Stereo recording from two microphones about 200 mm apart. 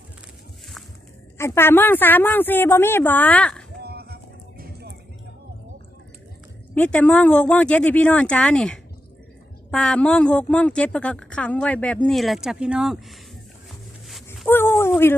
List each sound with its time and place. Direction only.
1.4 s a woman's voice: 10° left (ahead or behind)
3.8 s music: 50° right (ahead or behind)
6.7 s a woman's voice: 5° left (ahead or behind)
14.4 s a sound: 10° left (ahead or behind)